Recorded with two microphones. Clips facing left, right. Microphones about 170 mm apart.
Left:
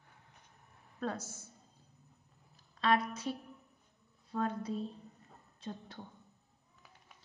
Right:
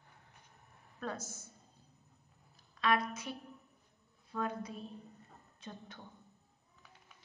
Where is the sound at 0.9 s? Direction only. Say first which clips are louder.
Left 3 dB; 30° left (ahead or behind).